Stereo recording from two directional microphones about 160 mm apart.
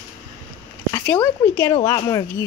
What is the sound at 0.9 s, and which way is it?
Speech, 15° left (ahead or behind).